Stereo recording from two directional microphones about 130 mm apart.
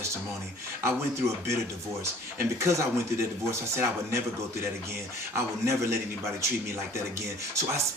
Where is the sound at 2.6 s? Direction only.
20° right (ahead or behind).